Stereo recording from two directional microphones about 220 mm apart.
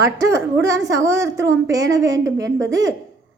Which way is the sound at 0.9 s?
15° right (ahead or behind).